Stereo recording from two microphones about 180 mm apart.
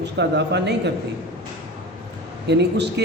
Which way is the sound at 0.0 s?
70° right (ahead or behind).